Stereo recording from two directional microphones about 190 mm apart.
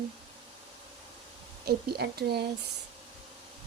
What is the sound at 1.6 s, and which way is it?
Speech, 55° right (ahead or behind).